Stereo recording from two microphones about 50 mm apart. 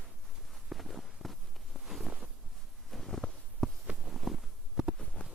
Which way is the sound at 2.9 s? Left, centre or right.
Centre.